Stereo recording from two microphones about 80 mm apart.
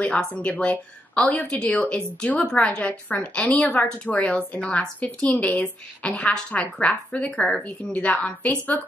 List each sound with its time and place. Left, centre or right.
0.0 s a woman's voice: centre